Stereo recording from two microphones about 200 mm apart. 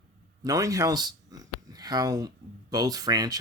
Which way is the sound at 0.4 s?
15° right (ahead or behind).